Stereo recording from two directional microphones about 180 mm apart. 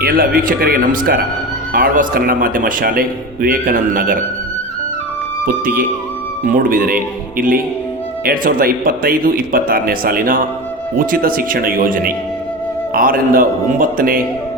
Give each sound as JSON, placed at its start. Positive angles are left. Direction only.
{"t": 0.0, "sound": "speech", "side_deg": -55}
{"t": 6.4, "sound": "speech", "side_deg": -50}